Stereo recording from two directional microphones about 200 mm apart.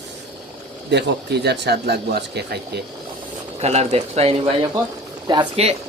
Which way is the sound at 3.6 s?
30° right (ahead or behind).